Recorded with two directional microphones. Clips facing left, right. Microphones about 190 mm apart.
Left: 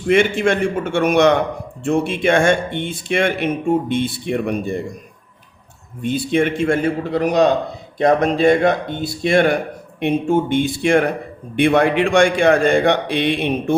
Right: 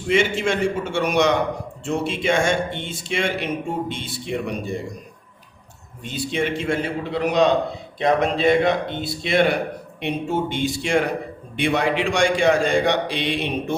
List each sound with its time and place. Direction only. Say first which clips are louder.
0.1 s speech: left 5 dB; 55° left (ahead or behind)
6.0 s speech: left 7 dB; 55° left (ahead or behind)